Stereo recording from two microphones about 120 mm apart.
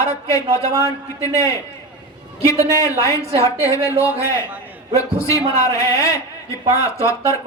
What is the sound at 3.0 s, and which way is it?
A woman's voice, 25° left (ahead or behind).